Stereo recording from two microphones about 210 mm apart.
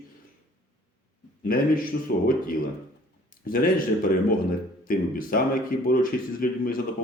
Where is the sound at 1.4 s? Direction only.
45° left (ahead or behind).